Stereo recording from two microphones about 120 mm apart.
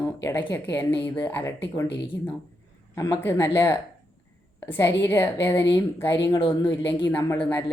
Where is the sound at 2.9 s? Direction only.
25° left (ahead or behind).